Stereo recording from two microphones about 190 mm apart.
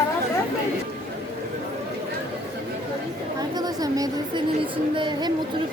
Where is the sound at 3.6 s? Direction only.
20° right (ahead or behind).